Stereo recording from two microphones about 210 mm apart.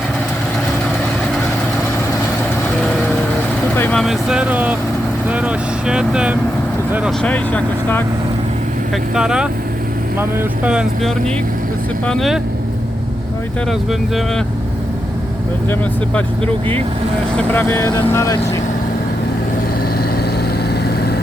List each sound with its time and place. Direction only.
3.8 s speech: 5° left (ahead or behind)
9.1 s speech: 5° right (ahead or behind)
17.3 s speech: 10° left (ahead or behind)